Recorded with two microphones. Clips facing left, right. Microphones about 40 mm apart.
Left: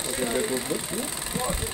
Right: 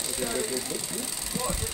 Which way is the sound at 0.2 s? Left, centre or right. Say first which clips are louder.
Left 4 dB; left.